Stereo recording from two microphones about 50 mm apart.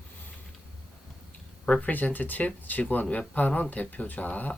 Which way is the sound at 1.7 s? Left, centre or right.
Left.